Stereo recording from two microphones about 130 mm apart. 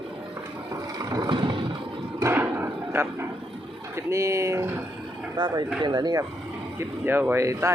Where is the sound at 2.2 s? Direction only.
20° right (ahead or behind).